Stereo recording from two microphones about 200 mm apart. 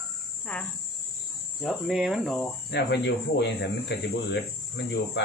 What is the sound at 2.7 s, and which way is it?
Speech, 60° left (ahead or behind).